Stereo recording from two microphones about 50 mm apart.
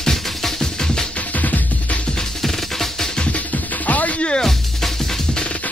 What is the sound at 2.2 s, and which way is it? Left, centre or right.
Music, centre.